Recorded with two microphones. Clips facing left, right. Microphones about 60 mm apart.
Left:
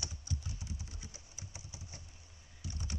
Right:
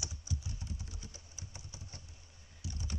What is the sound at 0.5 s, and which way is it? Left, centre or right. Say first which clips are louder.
Typing: right 1 dB; centre.